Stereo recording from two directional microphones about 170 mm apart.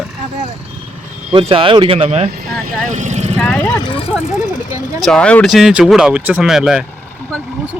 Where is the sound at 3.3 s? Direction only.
5° left (ahead or behind).